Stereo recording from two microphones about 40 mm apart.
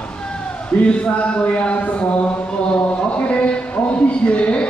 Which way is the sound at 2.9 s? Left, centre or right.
Left.